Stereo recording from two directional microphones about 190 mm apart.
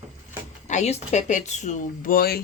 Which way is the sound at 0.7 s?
35° left (ahead or behind).